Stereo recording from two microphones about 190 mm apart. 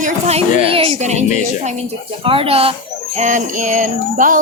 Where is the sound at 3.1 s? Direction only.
40° right (ahead or behind).